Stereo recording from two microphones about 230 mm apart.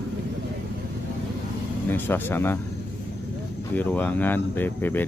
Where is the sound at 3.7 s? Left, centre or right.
Centre.